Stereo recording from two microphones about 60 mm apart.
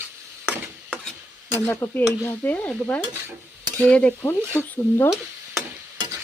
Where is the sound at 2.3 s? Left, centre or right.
Left.